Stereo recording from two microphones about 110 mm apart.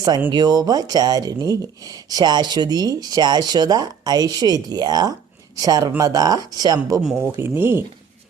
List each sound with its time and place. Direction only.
0.3 s speech: 40° right (ahead or behind)
7.2 s speech: 20° right (ahead or behind)